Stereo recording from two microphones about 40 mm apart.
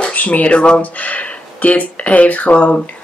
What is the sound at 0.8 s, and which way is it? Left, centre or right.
Speech, left.